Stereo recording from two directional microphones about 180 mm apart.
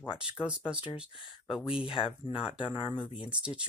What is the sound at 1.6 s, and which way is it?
Speech, 30° left (ahead or behind).